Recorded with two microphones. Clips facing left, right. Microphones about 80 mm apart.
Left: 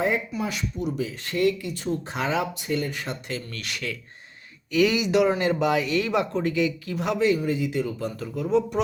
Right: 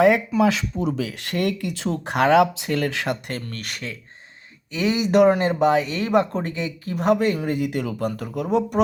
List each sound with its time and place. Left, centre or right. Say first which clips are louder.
0.0 s speech: right 9 dB; right
3.2 s speech: right 2 dB; right
4.7 s speech: right 1 dB; right
5.5 s speech: right 3 dB; right